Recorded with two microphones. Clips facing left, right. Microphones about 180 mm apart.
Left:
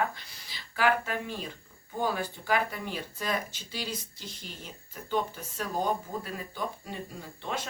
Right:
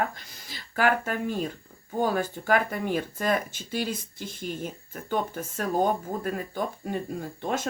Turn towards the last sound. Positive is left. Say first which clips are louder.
# right 7 dB
turn(degrees=-45)  # may be behind; listen again after turning